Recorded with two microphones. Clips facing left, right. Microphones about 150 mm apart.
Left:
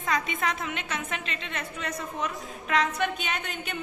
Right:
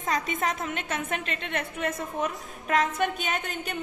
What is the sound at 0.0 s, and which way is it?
A woman's voice, 40° right (ahead or behind).